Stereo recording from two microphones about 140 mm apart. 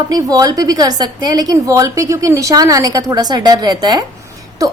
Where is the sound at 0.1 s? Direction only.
25° right (ahead or behind).